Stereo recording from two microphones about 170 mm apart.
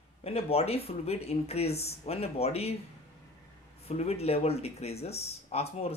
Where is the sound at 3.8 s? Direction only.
40° left (ahead or behind).